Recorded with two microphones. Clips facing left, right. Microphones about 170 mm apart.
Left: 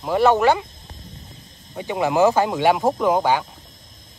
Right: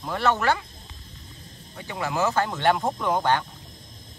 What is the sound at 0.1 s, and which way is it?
Speech, 15° left (ahead or behind).